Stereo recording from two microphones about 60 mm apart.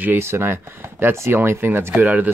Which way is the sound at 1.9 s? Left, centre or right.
Right.